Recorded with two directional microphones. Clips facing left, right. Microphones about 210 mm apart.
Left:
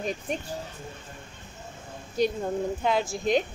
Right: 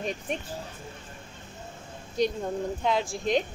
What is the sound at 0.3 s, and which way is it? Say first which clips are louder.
Speech: left 1 dB; centre (ahead or behind).